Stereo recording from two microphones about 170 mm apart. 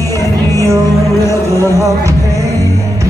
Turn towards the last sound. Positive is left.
turn(degrees=-20)  # may be behind; listen again after turning